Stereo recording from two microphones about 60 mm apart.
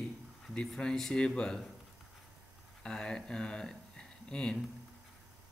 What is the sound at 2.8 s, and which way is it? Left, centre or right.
Speech, centre.